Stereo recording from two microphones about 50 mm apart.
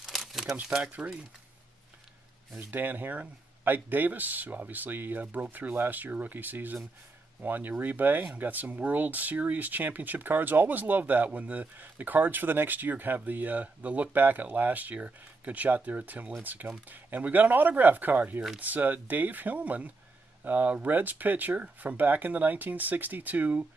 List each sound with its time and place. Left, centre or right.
0.0 s crumpling: centre
1.0 s speech: right
2.7 s speech: right
5.2 s speech: right